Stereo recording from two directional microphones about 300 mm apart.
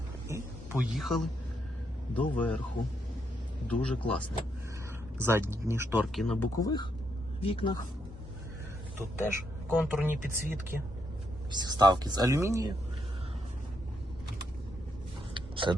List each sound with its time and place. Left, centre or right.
0.3 s a sound: centre
2.1 s speech: centre
3.7 s speech: centre
5.1 s speech: centre
9.6 s speech: centre
15.4 s a sound: centre